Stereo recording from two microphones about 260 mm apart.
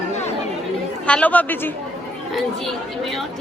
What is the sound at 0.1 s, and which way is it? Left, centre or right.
Chatter, left.